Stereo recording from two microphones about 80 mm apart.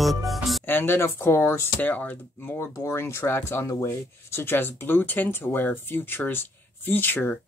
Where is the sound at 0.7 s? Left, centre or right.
Left.